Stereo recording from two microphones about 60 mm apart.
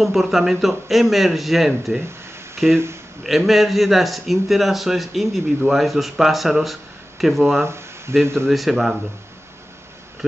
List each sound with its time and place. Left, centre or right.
0.0 s a man's voice: centre
8.1 s speech: right
8.5 s a man's voice: centre